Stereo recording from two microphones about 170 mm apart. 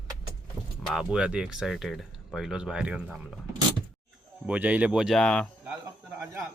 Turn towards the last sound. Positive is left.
turn(degrees=5)  # may be behind; listen again after turning